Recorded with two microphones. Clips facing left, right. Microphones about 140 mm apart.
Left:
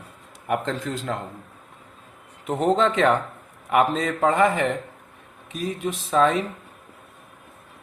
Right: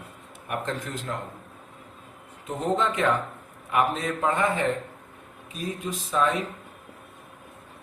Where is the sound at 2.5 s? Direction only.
75° left (ahead or behind).